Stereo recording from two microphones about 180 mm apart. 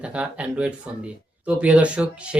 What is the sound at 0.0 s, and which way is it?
Speech, 5° right (ahead or behind).